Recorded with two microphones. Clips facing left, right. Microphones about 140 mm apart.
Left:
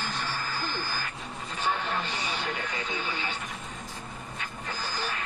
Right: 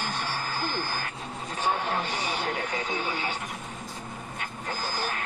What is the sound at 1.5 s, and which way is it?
Vehicle, 45° right (ahead or behind).